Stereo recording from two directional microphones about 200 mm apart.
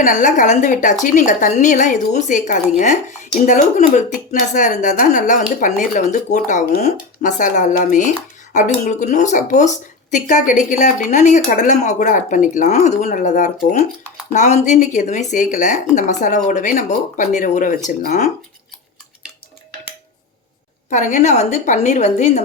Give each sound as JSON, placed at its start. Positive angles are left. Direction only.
{"t": 0.0, "sound": "speech", "side_deg": 40}
{"t": 20.9, "sound": "speech", "side_deg": 40}